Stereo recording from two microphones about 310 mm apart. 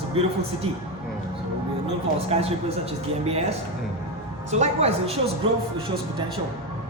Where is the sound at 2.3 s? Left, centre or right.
Centre.